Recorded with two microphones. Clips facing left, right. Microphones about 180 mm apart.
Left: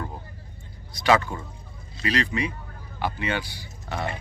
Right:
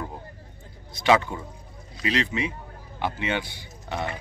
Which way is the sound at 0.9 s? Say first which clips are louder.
Even; 20° right (ahead or behind).